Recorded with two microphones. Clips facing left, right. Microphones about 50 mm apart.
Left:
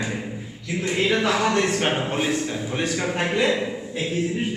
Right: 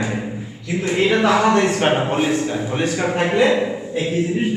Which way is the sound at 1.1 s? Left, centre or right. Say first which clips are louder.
Right 6 dB; right.